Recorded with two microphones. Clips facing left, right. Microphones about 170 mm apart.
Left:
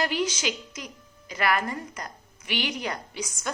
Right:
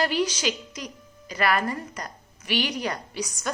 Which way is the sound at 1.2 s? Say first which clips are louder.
Right 2 dB; 15° left (ahead or behind).